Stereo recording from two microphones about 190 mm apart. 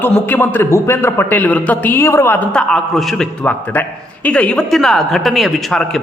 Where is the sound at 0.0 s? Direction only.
10° left (ahead or behind).